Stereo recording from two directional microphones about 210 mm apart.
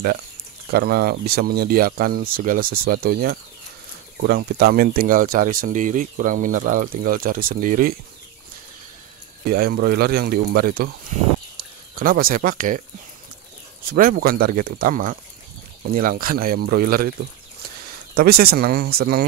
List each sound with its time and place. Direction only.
0.7 s speech: 45° right (ahead or behind)
9.5 s speech: 45° right (ahead or behind)
12.0 s speech: 45° right (ahead or behind)
13.8 s speech: 40° right (ahead or behind)
18.1 s speech: 45° right (ahead or behind)